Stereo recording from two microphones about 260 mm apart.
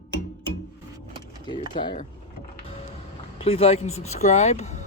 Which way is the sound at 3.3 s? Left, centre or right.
Left.